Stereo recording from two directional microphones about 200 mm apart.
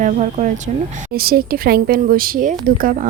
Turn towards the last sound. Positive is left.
turn(degrees=-45)  # may be behind; listen again after turning